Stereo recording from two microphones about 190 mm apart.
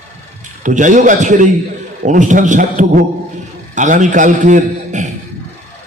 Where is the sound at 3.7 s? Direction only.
40° right (ahead or behind).